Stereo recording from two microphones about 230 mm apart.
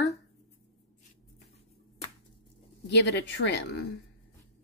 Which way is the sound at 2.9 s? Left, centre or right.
Left.